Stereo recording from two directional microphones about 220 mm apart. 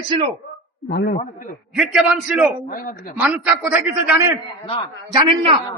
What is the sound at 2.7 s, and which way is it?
Speech, 40° left (ahead or behind).